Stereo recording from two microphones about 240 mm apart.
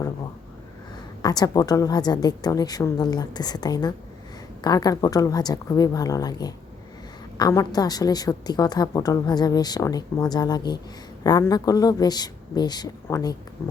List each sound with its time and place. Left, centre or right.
1.2 s a woman's voice: centre